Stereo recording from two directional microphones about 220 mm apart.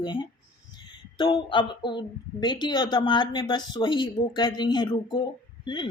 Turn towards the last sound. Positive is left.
turn(degrees=20)  # may be behind; listen again after turning